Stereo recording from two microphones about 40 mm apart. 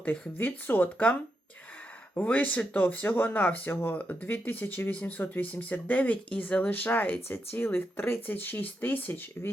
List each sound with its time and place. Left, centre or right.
0.3 s speech: left
2.1 s speech: left
3.7 s speech: left
4.3 s speech: left
4.9 s speech: left
6.7 s speech: left
7.3 s speech: left
8.3 s speech: left